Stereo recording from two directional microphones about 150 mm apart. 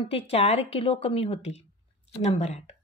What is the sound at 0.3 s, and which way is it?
Speech, 40° left (ahead or behind).